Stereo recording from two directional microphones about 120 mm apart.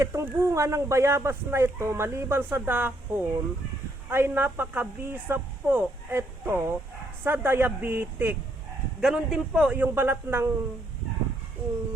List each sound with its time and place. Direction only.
0.0 s a woman's voice: 25° right (ahead or behind)
9.0 s a woman's voice: 5° right (ahead or behind)